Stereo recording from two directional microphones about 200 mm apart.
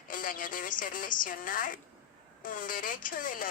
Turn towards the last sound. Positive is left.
turn(degrees=45)  # may be behind; listen again after turning